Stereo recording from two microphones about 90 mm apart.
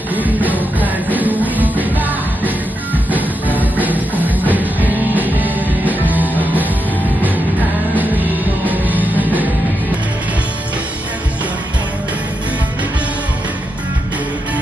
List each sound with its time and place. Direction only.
0.1 s music: 20° right (ahead or behind)
3.5 s music: 20° right (ahead or behind)
8.6 s music: 20° right (ahead or behind)